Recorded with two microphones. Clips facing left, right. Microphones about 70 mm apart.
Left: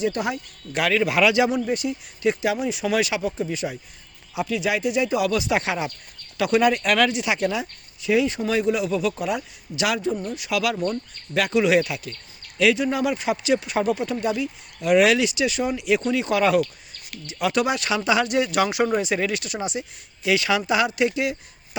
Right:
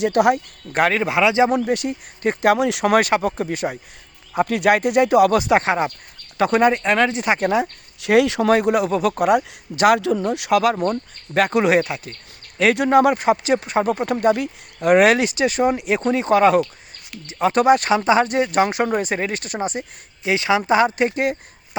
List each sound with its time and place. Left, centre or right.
0.0 s speech: right
0.7 s speech: right
1.5 s speech: right
2.6 s speech: right
7.2 s speech: right
8.0 s speech: right
8.5 s speech: right
10.0 s speech: right
10.5 s speech: right
12.7 s speech: right
20.2 s speech: right